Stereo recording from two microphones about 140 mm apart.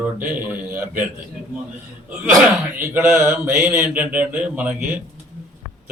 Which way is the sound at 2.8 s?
15° right (ahead or behind).